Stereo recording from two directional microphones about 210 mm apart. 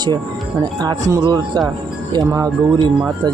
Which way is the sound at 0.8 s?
20° right (ahead or behind).